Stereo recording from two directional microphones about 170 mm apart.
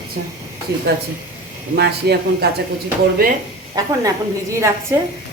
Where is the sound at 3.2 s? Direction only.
60° right (ahead or behind).